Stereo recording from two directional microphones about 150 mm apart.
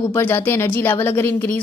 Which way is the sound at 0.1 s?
15° left (ahead or behind).